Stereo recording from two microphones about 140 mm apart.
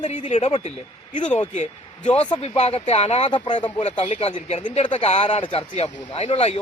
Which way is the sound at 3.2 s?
35° left (ahead or behind).